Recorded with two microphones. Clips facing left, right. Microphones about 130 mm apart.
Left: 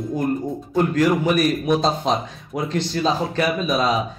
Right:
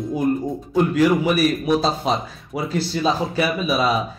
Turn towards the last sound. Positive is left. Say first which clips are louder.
# even
turn(degrees=-5)  # may be behind; listen again after turning